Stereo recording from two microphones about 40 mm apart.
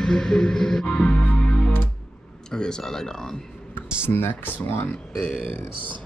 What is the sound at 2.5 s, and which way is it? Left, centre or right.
Speech, centre.